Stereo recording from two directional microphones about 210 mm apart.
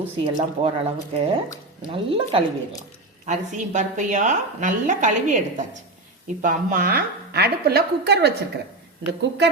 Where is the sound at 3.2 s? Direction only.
35° right (ahead or behind).